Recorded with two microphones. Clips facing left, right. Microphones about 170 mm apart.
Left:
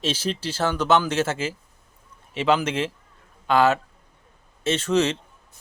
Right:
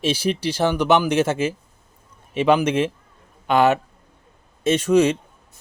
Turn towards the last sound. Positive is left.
turn(degrees=-15)  # may be behind; listen again after turning